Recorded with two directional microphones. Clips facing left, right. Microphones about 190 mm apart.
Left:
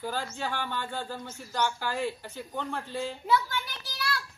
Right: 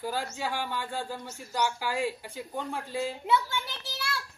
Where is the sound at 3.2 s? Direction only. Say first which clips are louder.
Left 2 dB; 25° right (ahead or behind).